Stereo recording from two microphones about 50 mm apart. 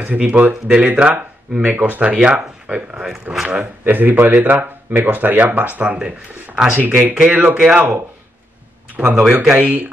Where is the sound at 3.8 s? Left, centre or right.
Right.